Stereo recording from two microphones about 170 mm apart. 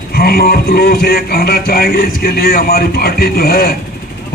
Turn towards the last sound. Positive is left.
turn(degrees=65)  # may be behind; listen again after turning